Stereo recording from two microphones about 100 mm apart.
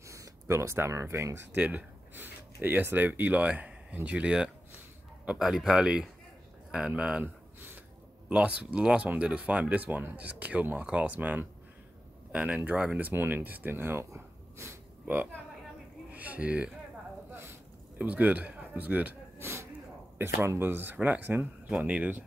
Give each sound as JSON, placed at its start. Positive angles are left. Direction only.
{"t": 0.1, "sound": "speech", "side_deg": -30}
{"t": 7.2, "sound": "a sound", "side_deg": -20}
{"t": 8.3, "sound": "speech", "side_deg": -10}
{"t": 17.3, "sound": "a sound", "side_deg": -20}
{"t": 19.4, "sound": "snort", "side_deg": -25}
{"t": 20.2, "sound": "speech", "side_deg": -25}